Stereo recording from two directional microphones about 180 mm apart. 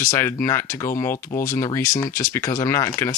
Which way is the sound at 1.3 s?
50° left (ahead or behind).